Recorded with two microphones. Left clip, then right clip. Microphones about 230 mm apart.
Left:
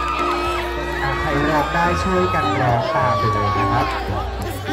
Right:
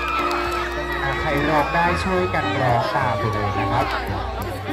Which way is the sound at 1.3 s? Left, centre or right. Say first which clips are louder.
Even; centre.